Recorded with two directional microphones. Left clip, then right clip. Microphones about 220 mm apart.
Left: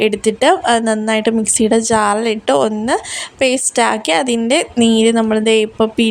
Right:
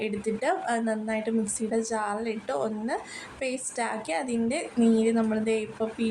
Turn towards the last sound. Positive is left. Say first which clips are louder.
# left 16 dB
turn(degrees=40)  # may be behind; listen again after turning